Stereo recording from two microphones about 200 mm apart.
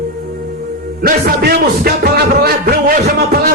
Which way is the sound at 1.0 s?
50° right (ahead or behind).